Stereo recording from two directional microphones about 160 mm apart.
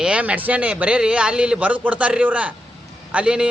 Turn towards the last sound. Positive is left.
turn(degrees=-5)  # may be behind; listen again after turning